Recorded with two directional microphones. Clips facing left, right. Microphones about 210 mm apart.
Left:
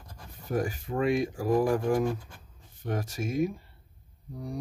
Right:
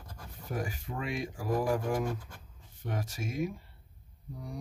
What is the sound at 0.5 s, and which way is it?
Speech, 45° left (ahead or behind).